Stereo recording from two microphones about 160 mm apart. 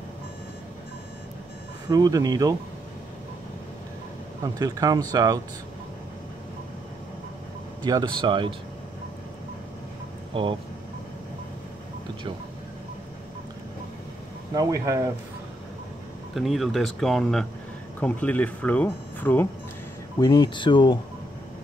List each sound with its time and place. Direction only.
1.9 s speech: 25° right (ahead or behind)
4.4 s speech: 20° right (ahead or behind)
7.8 s speech: 25° right (ahead or behind)
10.3 s speech: 30° right (ahead or behind)
14.5 s speech: 20° right (ahead or behind)
16.3 s speech: centre (ahead or behind)
20.2 s speech: 25° left (ahead or behind)